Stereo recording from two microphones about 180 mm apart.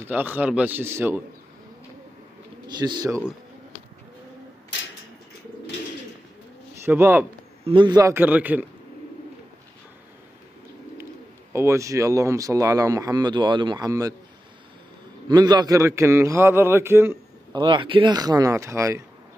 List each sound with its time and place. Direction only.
0.1 s a man's voice: 10° right (ahead or behind)
2.7 s speech: 25° right (ahead or behind)
6.8 s a man's voice: 15° right (ahead or behind)
7.6 s a man's voice: 25° right (ahead or behind); by 8.6 s 10° right (ahead or behind)
11.5 s speech: 15° right (ahead or behind)
15.2 s a man's voice: 25° right (ahead or behind)